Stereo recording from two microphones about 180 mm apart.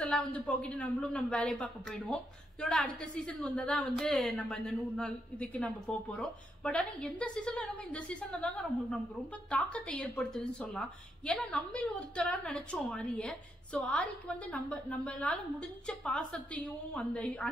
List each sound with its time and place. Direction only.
0.0 s a woman's voice: 5° left (ahead or behind)
9.5 s a woman's voice: 5° left (ahead or behind)